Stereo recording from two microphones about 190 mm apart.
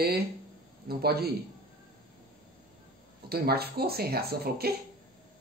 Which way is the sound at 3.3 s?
55° right (ahead or behind).